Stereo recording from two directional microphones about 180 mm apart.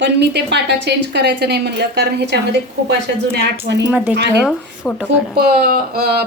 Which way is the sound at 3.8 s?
10° right (ahead or behind).